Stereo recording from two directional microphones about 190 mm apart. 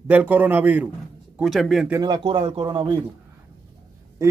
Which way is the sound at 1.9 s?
20° right (ahead or behind).